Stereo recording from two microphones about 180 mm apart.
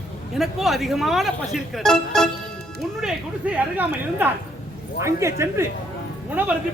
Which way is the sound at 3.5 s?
10° right (ahead or behind).